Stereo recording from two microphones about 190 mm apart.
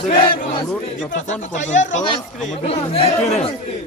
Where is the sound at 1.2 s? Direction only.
40° left (ahead or behind).